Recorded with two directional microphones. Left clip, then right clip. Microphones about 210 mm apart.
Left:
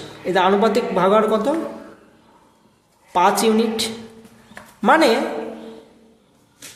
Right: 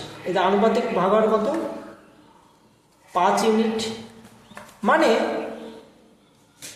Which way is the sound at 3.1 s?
45° left (ahead or behind).